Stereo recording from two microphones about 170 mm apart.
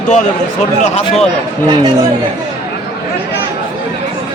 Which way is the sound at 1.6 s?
25° right (ahead or behind).